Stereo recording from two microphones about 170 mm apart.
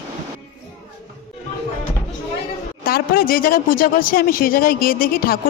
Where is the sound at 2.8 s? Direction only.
60° left (ahead or behind).